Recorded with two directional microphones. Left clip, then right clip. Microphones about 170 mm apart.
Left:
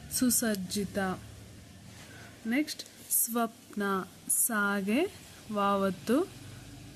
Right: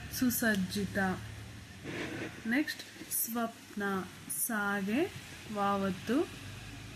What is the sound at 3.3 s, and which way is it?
Speech, 45° left (ahead or behind).